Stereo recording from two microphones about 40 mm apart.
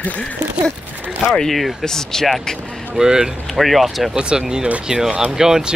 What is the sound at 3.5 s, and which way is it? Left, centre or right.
Speech, centre.